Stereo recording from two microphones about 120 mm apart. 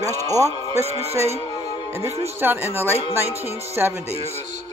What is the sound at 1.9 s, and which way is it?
Speech, 20° right (ahead or behind).